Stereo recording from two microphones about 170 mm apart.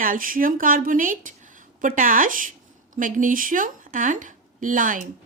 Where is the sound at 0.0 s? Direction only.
55° right (ahead or behind).